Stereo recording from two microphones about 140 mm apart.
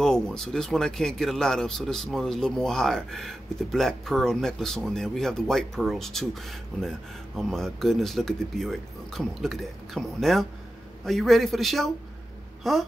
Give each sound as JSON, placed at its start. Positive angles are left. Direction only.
{"t": 0.0, "sound": "speech", "side_deg": 5}